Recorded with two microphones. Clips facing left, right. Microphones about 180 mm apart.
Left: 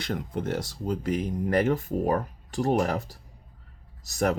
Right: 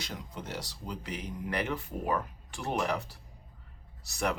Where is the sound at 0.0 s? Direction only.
55° left (ahead or behind).